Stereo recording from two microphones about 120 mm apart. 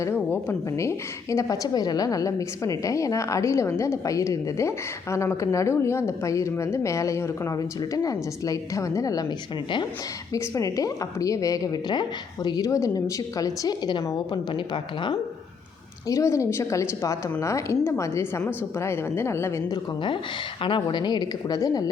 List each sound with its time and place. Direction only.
0.0 s a woman's voice: 20° left (ahead or behind)
10.3 s a woman's voice: 30° left (ahead or behind)
16.0 s a woman's voice: 25° left (ahead or behind)
20.6 s a woman's voice: 45° left (ahead or behind)